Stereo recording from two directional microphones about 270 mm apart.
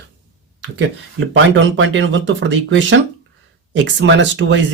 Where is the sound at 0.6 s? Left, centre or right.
Right.